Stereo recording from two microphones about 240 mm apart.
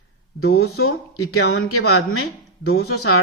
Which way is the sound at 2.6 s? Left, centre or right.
Left.